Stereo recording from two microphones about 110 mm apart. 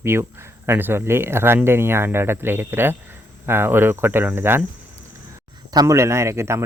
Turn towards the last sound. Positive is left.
turn(degrees=-25)  # may be behind; listen again after turning